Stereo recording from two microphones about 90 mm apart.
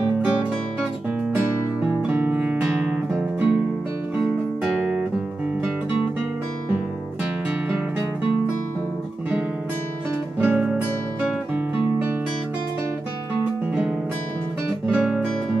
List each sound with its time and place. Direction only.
0.2 s music: 10° right (ahead or behind)
1.8 s music: 15° right (ahead or behind)
10.4 s music: 10° right (ahead or behind)
11.5 s guitar: 10° right (ahead or behind)
14.9 s guitar: 5° right (ahead or behind)